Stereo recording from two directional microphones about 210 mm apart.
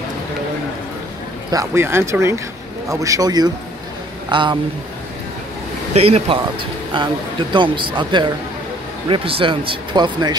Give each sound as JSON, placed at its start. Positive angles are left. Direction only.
{"t": 1.5, "sound": "speech", "side_deg": -15}
{"t": 5.9, "sound": "speech", "side_deg": -30}